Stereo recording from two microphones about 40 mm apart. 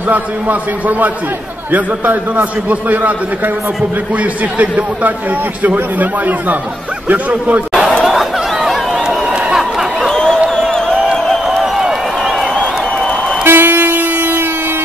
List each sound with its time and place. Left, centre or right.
0.1 s a man's voice: right
8.0 s chatter: centre
8.6 s run: centre
9.0 s run: right
9.5 s a sound: centre
10.1 s a sound: centre
10.5 s music: centre
11.6 s a sound: centre
12.5 s applause: left
13.4 s vehicle: right